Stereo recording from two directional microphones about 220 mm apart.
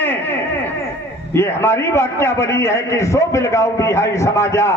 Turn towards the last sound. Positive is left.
turn(degrees=15)  # may be behind; listen again after turning